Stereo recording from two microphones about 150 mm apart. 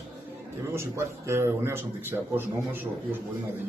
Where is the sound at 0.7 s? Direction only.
15° right (ahead or behind).